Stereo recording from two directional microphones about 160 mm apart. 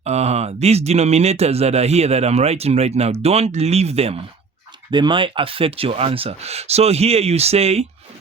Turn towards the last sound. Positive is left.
turn(degrees=-40)  # may be behind; listen again after turning